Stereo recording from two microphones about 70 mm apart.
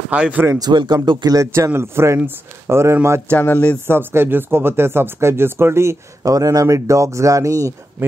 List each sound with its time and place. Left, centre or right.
0.1 s speech: right
0.6 s speech: right
1.5 s speech: right
3.3 s speech: left
3.8 s speech: right
6.2 s speech: right